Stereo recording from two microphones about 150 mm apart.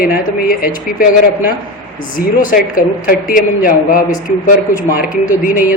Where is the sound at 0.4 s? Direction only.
70° left (ahead or behind).